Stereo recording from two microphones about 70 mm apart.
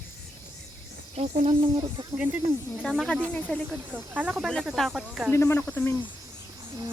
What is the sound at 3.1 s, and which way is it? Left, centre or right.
Speech, centre.